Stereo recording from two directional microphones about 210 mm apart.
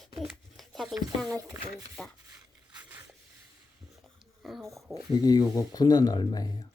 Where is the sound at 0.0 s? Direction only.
Centre (ahead or behind).